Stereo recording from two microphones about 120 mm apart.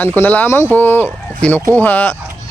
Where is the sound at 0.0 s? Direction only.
15° left (ahead or behind).